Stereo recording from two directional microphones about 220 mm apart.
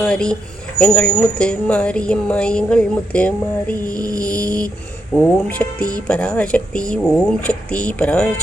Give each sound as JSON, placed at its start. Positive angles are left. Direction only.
{"t": 0.0, "sound": "a woman's voice", "side_deg": 5}
{"t": 3.9, "sound": "a sound", "side_deg": -15}
{"t": 4.2, "sound": "a woman's voice", "side_deg": 5}
{"t": 5.5, "sound": "a woman's voice", "side_deg": 5}